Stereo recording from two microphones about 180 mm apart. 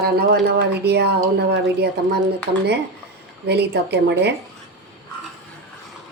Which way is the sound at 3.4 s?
65° right (ahead or behind).